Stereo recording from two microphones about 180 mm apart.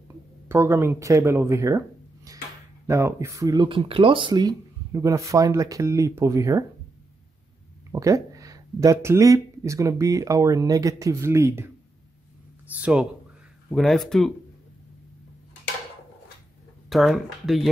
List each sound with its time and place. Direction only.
0.5 s speech: 10° right (ahead or behind)
7.9 s speech: 15° right (ahead or behind)
12.8 s speech: 5° right (ahead or behind)
16.9 s speech: centre (ahead or behind)